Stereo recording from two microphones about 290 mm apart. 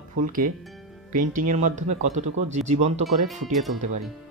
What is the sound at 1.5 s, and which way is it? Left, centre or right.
Speech, right.